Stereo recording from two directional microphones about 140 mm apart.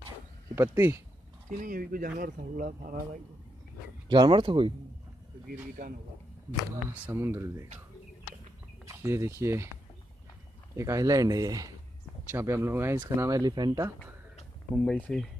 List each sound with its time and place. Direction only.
0.6 s speech: 15° right (ahead or behind)
1.6 s speech: 85° right
4.1 s speech: 35° right (ahead or behind)
5.8 s a man's voice: 65° right (ahead or behind)
6.9 s speech: 15° right (ahead or behind)
8.8 s speech: 20° right (ahead or behind)
10.8 s speech: 25° right (ahead or behind)
14.8 s speech: 5° left (ahead or behind)